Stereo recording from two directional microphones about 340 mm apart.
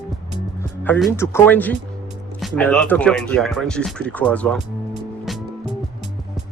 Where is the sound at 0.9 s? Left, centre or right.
Centre.